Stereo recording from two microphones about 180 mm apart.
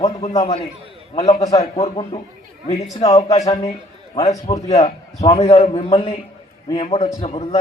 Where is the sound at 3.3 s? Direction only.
35° left (ahead or behind).